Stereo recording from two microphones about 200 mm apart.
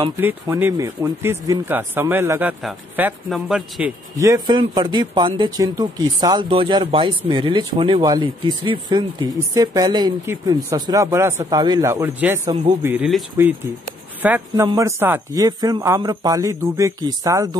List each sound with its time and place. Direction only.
0.2 s speech: 10° right (ahead or behind)
4.2 s speech: 20° right (ahead or behind)